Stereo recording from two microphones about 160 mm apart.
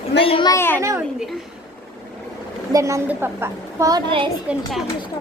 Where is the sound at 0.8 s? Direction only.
20° right (ahead or behind).